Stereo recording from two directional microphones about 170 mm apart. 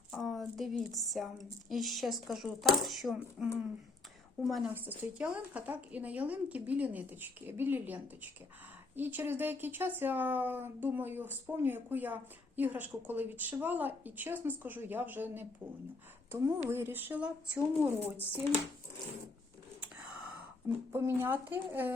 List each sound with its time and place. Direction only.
0.1 s a child's voice: centre (ahead or behind)
16.6 s speech: 15° right (ahead or behind)
20.7 s speech: 15° right (ahead or behind)